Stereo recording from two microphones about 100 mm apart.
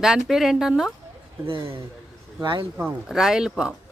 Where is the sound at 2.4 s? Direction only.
55° right (ahead or behind).